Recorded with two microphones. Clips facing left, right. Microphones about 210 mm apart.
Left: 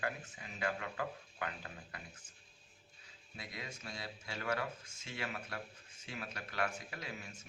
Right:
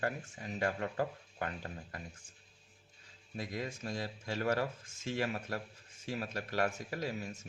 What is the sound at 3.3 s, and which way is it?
Speech, 45° right (ahead or behind).